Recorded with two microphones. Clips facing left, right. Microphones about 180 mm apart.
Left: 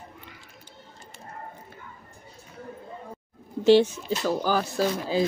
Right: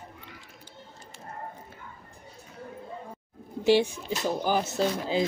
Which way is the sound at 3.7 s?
10° right (ahead or behind).